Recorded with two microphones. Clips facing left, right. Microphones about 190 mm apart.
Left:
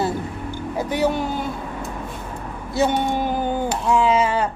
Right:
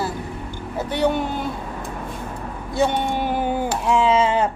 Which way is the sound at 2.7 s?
Centre (ahead or behind).